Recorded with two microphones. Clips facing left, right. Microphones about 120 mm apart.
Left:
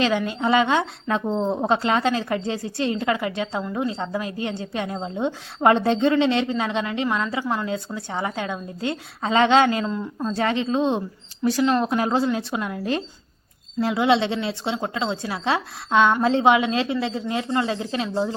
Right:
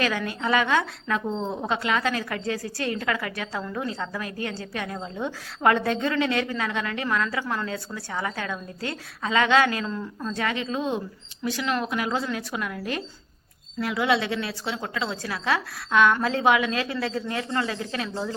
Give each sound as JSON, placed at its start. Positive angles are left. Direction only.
{"t": 0.0, "sound": "a woman's voice", "side_deg": 25}
{"t": 10.2, "sound": "a woman's voice", "side_deg": 30}